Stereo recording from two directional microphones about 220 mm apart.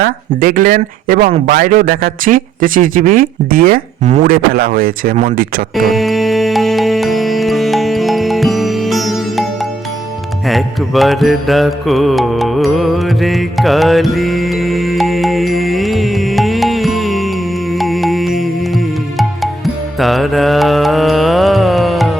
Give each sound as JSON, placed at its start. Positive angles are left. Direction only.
{"t": 0.0, "sound": "speech", "side_deg": -40}
{"t": 5.7, "sound": "music", "side_deg": 0}
{"t": 20.0, "sound": "mantra", "side_deg": 0}